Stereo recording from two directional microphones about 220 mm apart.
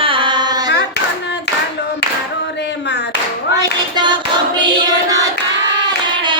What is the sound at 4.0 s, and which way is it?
Hands, 20° right (ahead or behind).